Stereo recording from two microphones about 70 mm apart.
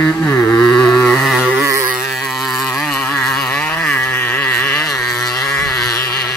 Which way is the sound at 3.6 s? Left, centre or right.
Centre.